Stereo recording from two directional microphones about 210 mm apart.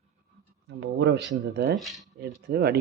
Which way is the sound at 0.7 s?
55° right (ahead or behind).